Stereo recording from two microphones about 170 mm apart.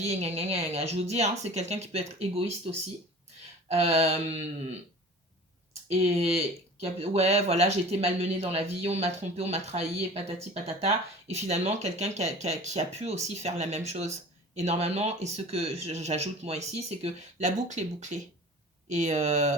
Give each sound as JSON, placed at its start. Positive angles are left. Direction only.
{"t": 0.0, "sound": "speech", "side_deg": -40}
{"t": 3.7, "sound": "speech", "side_deg": -40}
{"t": 5.9, "sound": "speech", "side_deg": -35}